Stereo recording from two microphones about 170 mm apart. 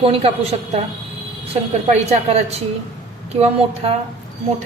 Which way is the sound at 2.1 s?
40° right (ahead or behind).